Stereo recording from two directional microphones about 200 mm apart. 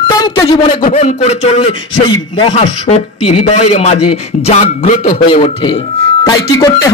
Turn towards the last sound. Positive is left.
turn(degrees=15)  # may be behind; listen again after turning